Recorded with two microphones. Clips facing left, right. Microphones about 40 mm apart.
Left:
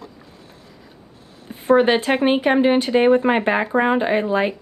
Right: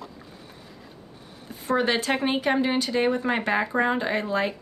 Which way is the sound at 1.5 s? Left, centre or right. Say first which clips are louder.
Left 8 dB; left.